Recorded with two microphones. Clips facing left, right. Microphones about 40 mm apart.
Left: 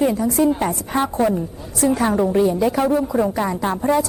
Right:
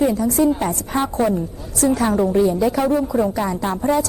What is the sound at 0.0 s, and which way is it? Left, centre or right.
Speech, centre.